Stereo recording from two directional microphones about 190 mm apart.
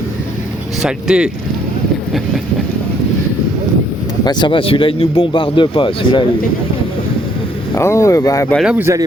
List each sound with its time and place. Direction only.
0.8 s speech: 5° right (ahead or behind)
4.2 s speech: 25° left (ahead or behind)
7.8 s speech: 15° left (ahead or behind)
8.6 s speech: 10° right (ahead or behind)